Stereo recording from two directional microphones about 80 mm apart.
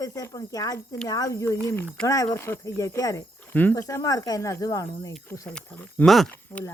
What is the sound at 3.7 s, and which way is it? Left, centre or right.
Speech, left.